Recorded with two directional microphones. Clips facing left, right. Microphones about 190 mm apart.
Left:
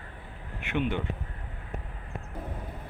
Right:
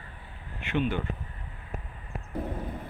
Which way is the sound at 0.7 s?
15° left (ahead or behind).